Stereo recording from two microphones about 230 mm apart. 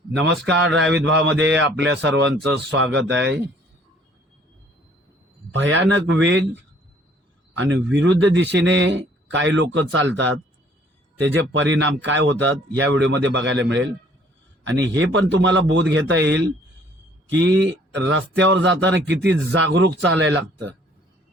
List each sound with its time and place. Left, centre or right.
0.1 s a man's voice: right
5.5 s speech: right
7.9 s speech: right